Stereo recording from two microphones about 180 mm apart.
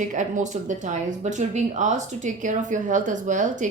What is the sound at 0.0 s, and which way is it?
Speech, 45° right (ahead or behind).